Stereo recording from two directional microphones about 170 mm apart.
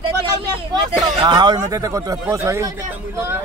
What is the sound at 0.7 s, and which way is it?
A man's voice, 25° right (ahead or behind).